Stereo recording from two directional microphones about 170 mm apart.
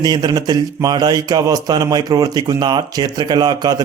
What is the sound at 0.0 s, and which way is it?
A man's voice, 25° right (ahead or behind).